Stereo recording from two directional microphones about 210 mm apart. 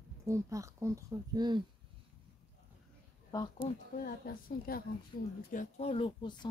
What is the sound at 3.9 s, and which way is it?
Speech, 45° left (ahead or behind).